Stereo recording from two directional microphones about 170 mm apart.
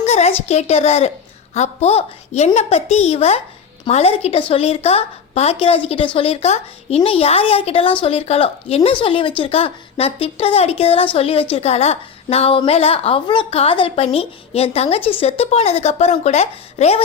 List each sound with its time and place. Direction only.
0.0 s a woman's voice: 40° left (ahead or behind)